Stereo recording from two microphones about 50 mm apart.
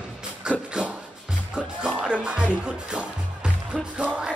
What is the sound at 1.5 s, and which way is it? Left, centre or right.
Music, centre.